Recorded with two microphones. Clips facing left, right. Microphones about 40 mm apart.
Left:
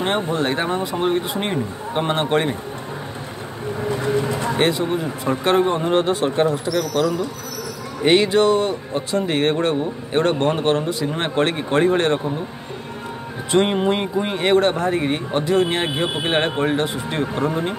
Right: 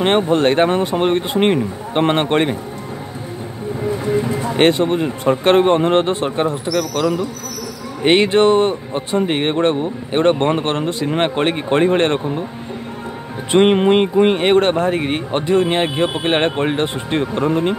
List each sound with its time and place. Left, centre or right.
0.0 s speech: right
4.6 s speech: right
11.1 s speech: right
13.5 s speech: right